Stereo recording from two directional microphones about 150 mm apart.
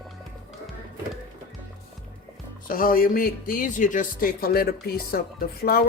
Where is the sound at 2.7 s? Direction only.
70° left (ahead or behind); by 5.8 s 90° left.